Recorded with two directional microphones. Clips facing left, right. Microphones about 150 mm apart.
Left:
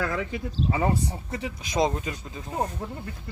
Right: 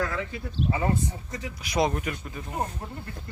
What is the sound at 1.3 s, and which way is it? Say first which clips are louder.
Speech: left 1 dB; 20° left (ahead or behind).